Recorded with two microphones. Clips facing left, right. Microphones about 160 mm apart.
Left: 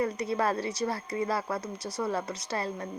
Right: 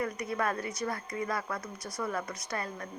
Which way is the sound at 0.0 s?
30° left (ahead or behind).